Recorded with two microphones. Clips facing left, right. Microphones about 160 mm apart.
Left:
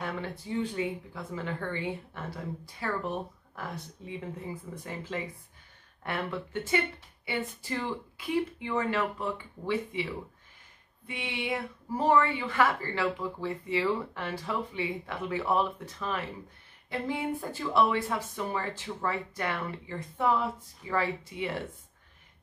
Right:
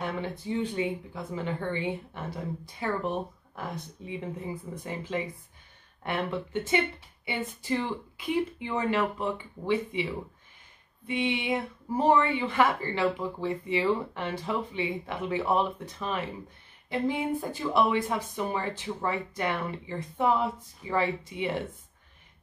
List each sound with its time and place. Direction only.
0.0 s speech: 20° right (ahead or behind)
11.1 s speech: 20° right (ahead or behind)